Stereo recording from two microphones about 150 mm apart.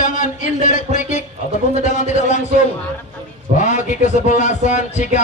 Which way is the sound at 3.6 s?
55° left (ahead or behind).